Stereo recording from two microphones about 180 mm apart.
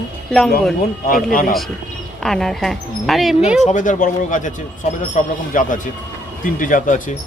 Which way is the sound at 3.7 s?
45° left (ahead or behind).